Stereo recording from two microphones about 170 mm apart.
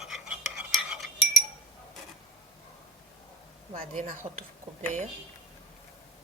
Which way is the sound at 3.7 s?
45° right (ahead or behind).